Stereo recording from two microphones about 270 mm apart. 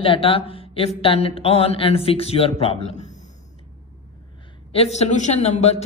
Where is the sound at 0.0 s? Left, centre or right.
Centre.